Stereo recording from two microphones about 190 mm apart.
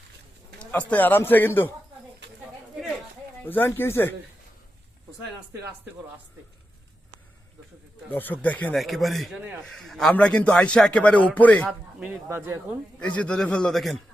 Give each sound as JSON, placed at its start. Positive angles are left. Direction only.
{"t": 0.6, "sound": "speech", "side_deg": 5}
{"t": 2.2, "sound": "a sound", "side_deg": -70}
{"t": 3.4, "sound": "speech", "side_deg": 10}
{"t": 8.1, "sound": "speech", "side_deg": 10}
{"t": 11.9, "sound": "speech", "side_deg": -10}
{"t": 13.0, "sound": "a man's voice", "side_deg": 5}